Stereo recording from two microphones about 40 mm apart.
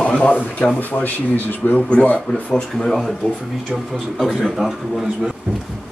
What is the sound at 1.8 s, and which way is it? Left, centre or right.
Speech, left.